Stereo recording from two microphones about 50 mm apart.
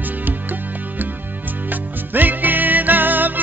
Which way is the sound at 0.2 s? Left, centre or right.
Right.